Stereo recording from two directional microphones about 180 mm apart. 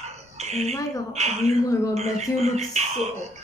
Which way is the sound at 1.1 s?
35° right (ahead or behind).